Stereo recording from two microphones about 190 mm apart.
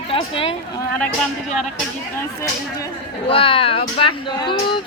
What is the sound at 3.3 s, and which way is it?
Speech, 30° left (ahead or behind).